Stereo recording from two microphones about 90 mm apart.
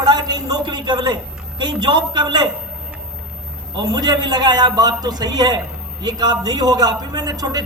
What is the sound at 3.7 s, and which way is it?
A man's voice, 55° right (ahead or behind).